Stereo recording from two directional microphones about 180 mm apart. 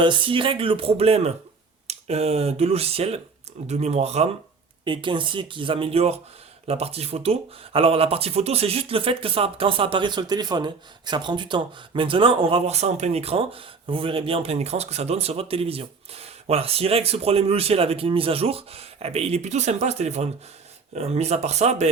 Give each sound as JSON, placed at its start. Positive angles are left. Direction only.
{"t": 0.0, "sound": "speech", "side_deg": -25}